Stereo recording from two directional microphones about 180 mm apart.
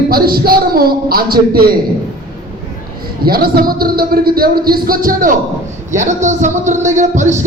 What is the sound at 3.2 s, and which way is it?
A woman's voice, 55° right (ahead or behind).